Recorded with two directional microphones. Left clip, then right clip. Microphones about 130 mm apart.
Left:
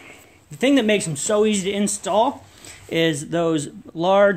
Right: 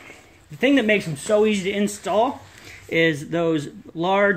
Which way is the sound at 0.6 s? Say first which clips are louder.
Even; 35° left (ahead or behind).